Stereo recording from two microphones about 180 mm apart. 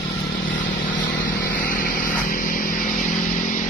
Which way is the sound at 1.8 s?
50° left (ahead or behind).